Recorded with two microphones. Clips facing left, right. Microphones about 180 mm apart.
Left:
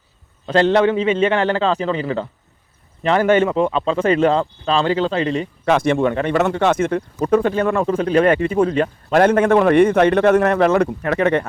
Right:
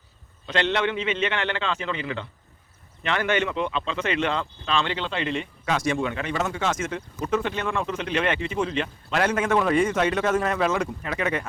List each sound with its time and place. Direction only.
0.4 s speech: 40° left (ahead or behind)
5.6 s speech: 60° left (ahead or behind)
6.3 s speech: 65° left (ahead or behind)
7.5 s speech: 40° left (ahead or behind); by 11.4 s 55° left (ahead or behind)